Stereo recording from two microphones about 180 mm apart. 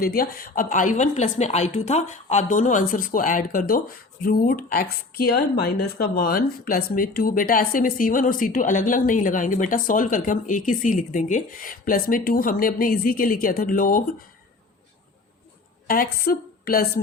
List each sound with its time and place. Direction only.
0.0 s speech: 55° left (ahead or behind)
15.9 s a woman's voice: 55° left (ahead or behind)